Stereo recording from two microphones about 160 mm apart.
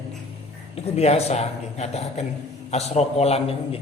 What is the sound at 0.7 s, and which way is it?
A man's voice, 40° left (ahead or behind).